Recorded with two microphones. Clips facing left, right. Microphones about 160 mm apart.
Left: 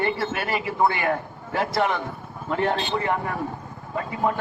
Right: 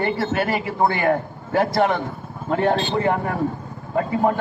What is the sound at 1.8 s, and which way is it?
A man's voice, 55° right (ahead or behind).